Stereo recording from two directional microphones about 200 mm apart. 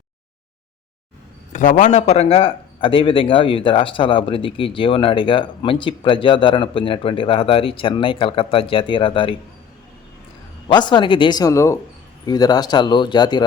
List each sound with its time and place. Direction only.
1.5 s speech: 40° left (ahead or behind)
10.7 s speech: 20° left (ahead or behind)